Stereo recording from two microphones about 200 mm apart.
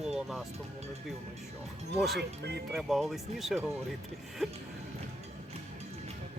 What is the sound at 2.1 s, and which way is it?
Speech, 55° right (ahead or behind).